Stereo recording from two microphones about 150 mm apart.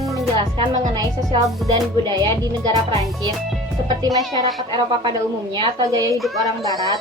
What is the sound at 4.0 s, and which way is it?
Speech, 25° right (ahead or behind).